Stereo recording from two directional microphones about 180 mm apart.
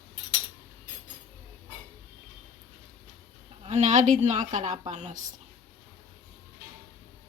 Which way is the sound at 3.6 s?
40° right (ahead or behind).